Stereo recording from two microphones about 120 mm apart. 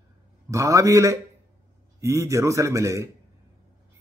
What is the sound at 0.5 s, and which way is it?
A man's voice, 25° right (ahead or behind).